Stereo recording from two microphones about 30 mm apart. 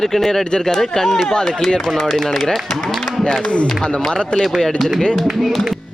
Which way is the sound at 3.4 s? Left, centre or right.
Left.